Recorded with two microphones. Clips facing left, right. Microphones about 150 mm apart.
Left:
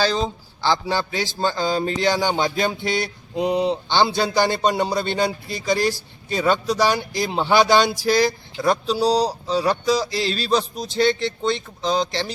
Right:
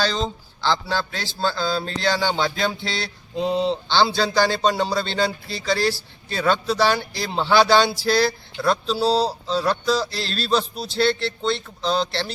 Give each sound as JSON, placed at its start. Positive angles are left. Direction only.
{"t": 0.0, "sound": "a man's voice", "side_deg": 10}